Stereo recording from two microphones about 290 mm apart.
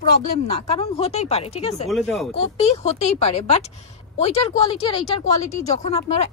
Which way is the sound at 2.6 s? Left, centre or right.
Left.